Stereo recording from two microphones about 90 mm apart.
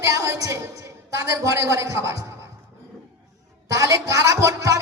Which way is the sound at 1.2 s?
35° right (ahead or behind).